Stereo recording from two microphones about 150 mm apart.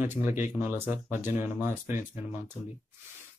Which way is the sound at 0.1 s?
15° right (ahead or behind).